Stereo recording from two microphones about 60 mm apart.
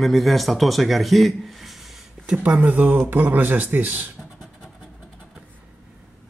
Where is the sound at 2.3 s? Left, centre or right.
Right.